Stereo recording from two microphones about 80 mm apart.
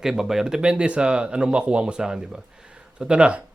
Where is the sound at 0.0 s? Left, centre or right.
Centre.